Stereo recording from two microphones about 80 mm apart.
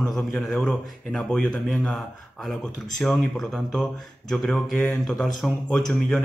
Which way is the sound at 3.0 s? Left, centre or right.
Centre.